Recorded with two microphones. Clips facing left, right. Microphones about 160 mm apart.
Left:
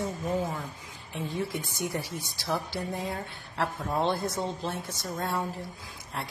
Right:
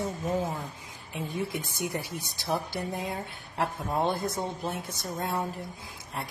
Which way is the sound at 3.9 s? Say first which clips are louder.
Left 1 dB; 20° right (ahead or behind).